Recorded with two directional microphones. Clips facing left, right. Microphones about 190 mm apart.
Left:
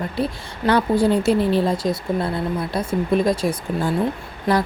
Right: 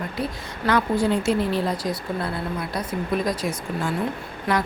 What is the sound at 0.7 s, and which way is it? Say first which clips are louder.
A woman's voice: left 4 dB; 30° left (ahead or behind).